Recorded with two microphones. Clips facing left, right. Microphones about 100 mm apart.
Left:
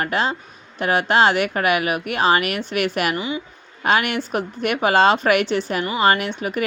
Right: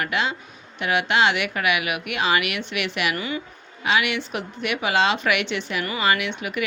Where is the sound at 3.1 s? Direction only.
20° left (ahead or behind).